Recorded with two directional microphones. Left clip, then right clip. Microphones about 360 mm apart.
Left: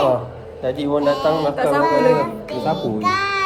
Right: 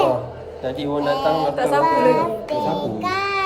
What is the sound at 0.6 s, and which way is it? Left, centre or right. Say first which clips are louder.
Speech: left 4 dB; centre.